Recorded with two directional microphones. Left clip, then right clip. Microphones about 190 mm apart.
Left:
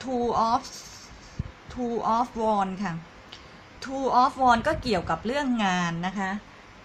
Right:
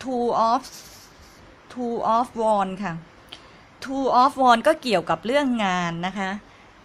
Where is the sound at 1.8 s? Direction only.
40° right (ahead or behind).